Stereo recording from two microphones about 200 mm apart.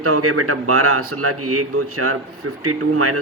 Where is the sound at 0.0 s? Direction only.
90° right.